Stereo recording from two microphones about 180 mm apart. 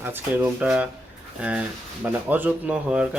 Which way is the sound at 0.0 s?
10° right (ahead or behind).